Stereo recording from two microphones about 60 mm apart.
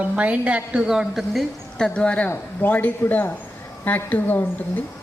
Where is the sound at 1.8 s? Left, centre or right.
Centre.